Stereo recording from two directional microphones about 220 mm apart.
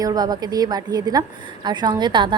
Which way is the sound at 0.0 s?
20° right (ahead or behind).